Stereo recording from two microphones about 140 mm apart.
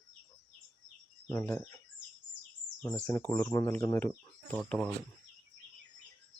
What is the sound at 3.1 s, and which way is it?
Speech, 15° left (ahead or behind).